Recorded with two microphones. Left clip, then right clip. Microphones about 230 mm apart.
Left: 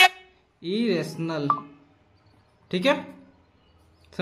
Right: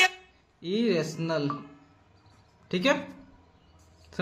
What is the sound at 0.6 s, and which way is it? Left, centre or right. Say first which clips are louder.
Speech: left 1 dB; centre.